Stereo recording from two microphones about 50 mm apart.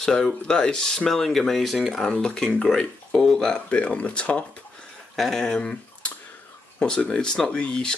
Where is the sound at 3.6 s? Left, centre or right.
Left.